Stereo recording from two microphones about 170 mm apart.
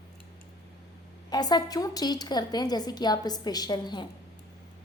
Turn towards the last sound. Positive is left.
turn(degrees=25)  # may be behind; listen again after turning